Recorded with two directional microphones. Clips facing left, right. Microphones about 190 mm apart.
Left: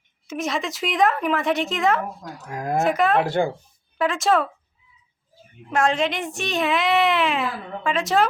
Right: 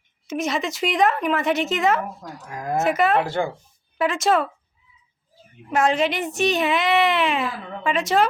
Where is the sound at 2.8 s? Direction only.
Centre (ahead or behind).